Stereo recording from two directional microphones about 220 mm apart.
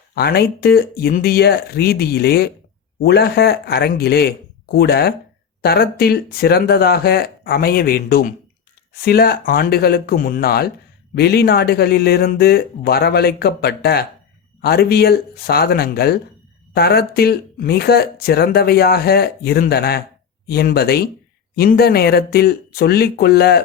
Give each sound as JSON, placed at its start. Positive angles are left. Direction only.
{"t": 0.1, "sound": "speech", "side_deg": 45}